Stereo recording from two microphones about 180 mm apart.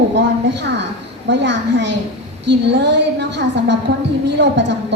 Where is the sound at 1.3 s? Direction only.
75° right (ahead or behind).